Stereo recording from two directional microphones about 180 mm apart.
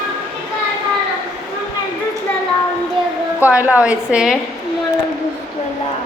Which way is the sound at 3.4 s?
10° right (ahead or behind).